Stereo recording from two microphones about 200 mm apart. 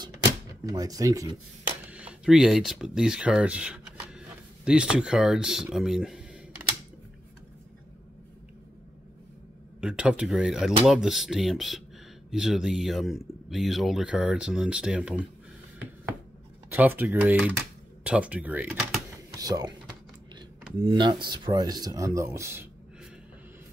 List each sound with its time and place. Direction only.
0.2 s a sound: 20° right (ahead or behind)
1.9 s speech: 5° right (ahead or behind)
9.8 s speech: 5° right (ahead or behind)
16.7 s speech: 10° right (ahead or behind)
19.3 s speech: 20° right (ahead or behind)
20.8 s speech: 20° right (ahead or behind)